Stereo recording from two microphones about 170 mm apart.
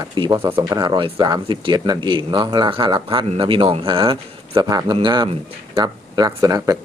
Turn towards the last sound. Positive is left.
turn(degrees=-20)  # may be behind; listen again after turning